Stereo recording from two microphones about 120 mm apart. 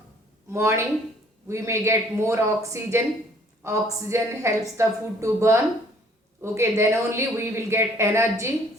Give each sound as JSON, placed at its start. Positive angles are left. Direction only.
{"t": 0.5, "sound": "speech", "side_deg": -25}